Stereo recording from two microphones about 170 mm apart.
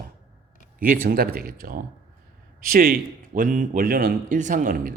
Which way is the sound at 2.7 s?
60° right (ahead or behind).